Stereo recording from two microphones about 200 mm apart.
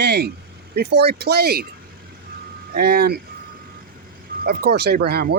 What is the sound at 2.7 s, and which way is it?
Speech, 50° right (ahead or behind).